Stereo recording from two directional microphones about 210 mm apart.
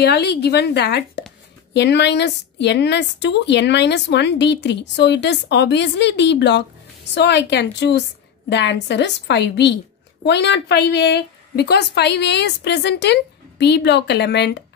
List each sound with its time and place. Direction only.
0.0 s a woman's voice: 50° left (ahead or behind)